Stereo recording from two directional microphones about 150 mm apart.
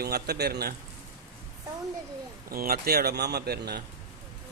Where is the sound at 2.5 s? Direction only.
80° right.